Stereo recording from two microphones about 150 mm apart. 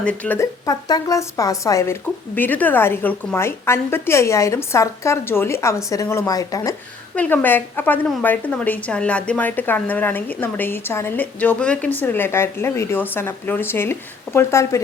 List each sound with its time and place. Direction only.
0.0 s speech: 10° left (ahead or behind)
0.3 s speech: 25° left (ahead or behind)